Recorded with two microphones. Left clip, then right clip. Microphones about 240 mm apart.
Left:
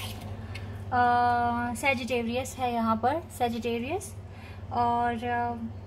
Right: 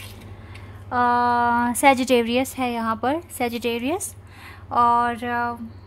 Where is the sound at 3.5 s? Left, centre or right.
Right.